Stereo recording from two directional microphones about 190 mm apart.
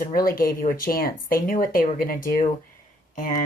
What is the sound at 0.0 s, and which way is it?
Speech, 50° left (ahead or behind).